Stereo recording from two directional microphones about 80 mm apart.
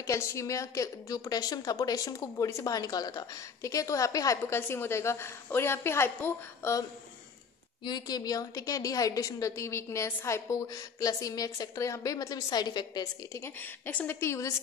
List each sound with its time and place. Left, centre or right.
0.0 s a woman's voice: left
7.8 s a woman's voice: left
13.6 s a woman's voice: left
14.2 s a woman's voice: left